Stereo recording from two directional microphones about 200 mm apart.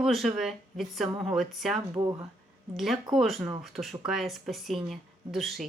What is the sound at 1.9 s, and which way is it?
Speech, 20° right (ahead or behind).